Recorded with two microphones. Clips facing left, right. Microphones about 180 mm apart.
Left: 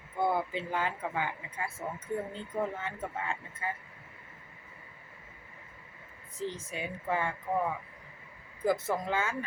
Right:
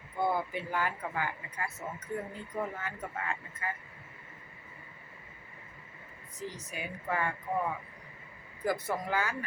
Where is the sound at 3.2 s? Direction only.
30° left (ahead or behind).